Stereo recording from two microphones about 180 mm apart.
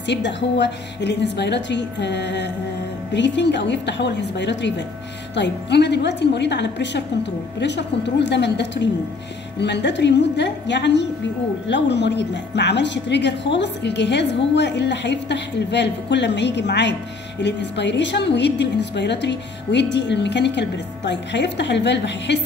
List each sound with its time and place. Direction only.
0.0 s a woman's voice: 75° left (ahead or behind)